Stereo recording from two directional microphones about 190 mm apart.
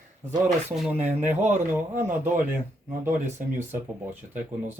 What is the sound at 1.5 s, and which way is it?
Speech, 10° right (ahead or behind).